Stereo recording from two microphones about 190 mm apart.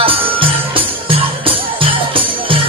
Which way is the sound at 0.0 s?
30° right (ahead or behind).